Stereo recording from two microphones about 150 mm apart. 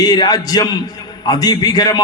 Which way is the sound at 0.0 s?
25° left (ahead or behind).